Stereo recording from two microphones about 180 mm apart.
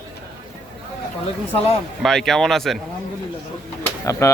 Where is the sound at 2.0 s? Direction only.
Centre (ahead or behind).